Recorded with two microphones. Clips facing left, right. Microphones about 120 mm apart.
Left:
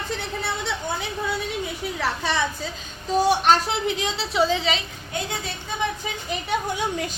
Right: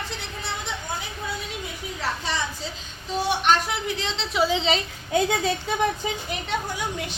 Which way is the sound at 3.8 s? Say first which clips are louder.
Left 4 dB; 20° left (ahead or behind).